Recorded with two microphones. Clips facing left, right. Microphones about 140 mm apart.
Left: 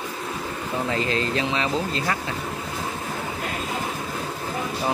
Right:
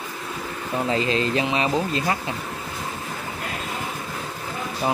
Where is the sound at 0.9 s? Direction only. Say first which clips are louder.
Right 3 dB; 20° right (ahead or behind).